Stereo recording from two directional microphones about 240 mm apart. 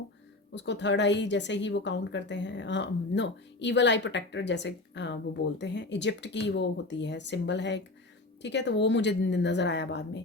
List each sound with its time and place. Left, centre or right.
0.5 s a woman's voice: left